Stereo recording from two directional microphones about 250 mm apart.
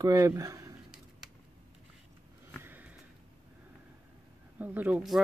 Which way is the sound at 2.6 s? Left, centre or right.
Centre.